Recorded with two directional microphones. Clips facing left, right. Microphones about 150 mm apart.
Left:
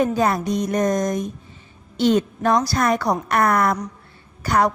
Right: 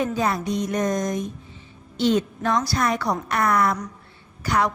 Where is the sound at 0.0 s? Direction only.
45° left (ahead or behind).